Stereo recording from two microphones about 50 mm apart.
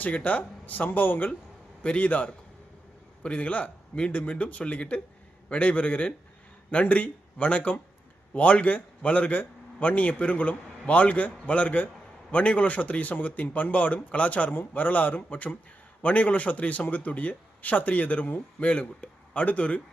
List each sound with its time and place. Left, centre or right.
0.0 s a man's voice: left
1.8 s a man's voice: left